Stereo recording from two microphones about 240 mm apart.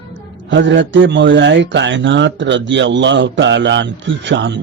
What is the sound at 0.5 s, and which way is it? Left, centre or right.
Speech, right.